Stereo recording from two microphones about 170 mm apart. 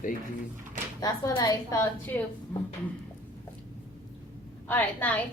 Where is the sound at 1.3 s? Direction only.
25° left (ahead or behind).